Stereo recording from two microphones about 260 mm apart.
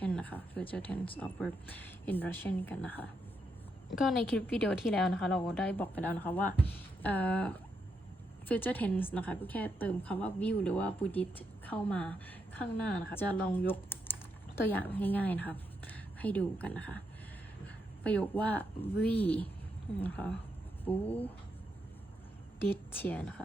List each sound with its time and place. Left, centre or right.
0.0 s a sound: centre
0.7 s a woman's voice: centre
18.0 s a woman's voice: centre
22.6 s speech: centre